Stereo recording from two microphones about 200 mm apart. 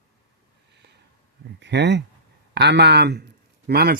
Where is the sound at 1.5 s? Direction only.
60° right (ahead or behind).